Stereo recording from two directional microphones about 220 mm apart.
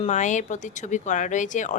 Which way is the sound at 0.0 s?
35° left (ahead or behind).